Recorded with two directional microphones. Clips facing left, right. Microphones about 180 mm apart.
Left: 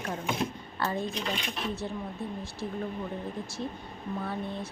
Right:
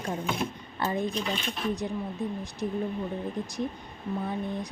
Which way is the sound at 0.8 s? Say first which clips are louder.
Right 2 dB; 15° right (ahead or behind).